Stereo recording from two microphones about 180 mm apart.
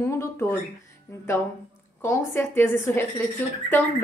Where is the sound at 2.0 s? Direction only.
15° left (ahead or behind).